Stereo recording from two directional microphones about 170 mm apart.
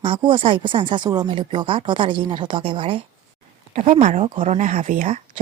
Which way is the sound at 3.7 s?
40° right (ahead or behind).